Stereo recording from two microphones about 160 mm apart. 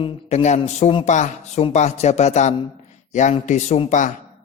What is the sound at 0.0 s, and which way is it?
A man's voice, 45° left (ahead or behind).